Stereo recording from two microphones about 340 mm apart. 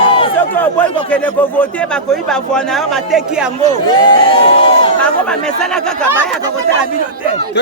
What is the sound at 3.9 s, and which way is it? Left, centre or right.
Speech, centre.